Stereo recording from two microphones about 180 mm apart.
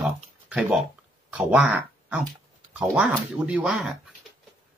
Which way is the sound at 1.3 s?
5° right (ahead or behind).